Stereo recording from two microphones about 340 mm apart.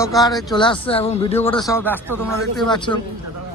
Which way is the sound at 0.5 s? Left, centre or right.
Centre.